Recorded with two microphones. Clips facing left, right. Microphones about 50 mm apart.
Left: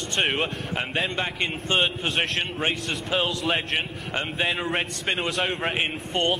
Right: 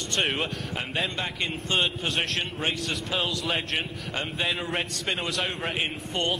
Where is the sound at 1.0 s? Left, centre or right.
Left.